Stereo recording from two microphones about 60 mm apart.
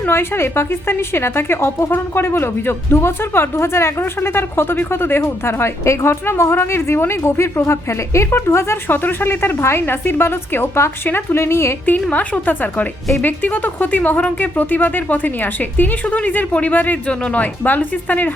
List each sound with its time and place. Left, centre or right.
0.1 s speech: left
12.1 s speech: left